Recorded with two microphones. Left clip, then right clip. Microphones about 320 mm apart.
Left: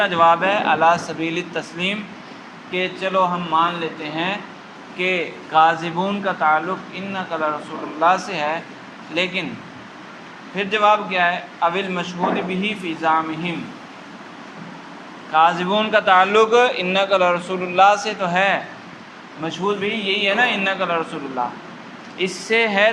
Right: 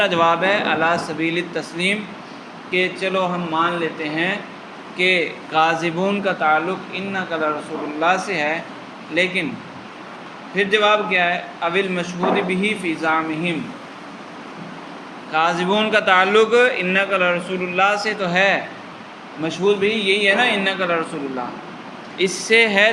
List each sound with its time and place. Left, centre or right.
0.0 s a man's voice: centre
8.0 s a man's voice: centre
10.5 s a man's voice: centre
15.3 s a man's voice: centre
22.2 s a man's voice: centre